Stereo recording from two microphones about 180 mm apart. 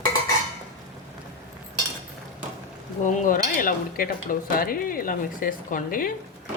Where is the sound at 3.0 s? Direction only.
50° left (ahead or behind).